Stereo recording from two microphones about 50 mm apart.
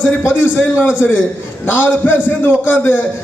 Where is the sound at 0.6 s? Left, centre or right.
Left.